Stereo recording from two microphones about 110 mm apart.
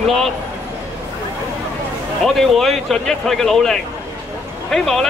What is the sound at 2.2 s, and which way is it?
A man's voice, centre (ahead or behind).